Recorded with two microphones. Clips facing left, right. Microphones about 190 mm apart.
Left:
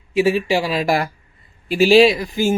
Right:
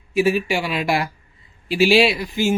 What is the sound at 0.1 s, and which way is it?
Speech, 25° left (ahead or behind).